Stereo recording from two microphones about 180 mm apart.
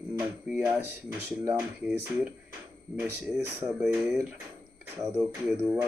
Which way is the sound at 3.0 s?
5° right (ahead or behind).